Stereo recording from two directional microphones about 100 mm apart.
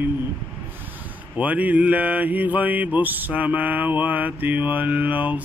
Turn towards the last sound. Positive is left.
turn(degrees=-15)  # may be behind; listen again after turning